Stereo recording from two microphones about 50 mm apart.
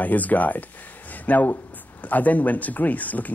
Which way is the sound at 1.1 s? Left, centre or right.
Left.